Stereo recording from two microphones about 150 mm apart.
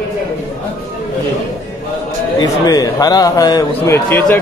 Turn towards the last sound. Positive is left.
turn(degrees=15)  # may be behind; listen again after turning